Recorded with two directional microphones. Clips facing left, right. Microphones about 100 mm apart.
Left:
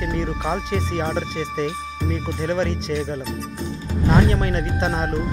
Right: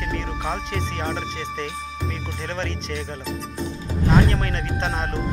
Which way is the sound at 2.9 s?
5° left (ahead or behind).